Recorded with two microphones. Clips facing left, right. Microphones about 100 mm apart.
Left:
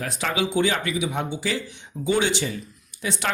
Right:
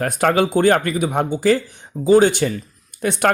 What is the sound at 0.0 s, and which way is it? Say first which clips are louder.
Speech: right 9 dB; 50° right (ahead or behind).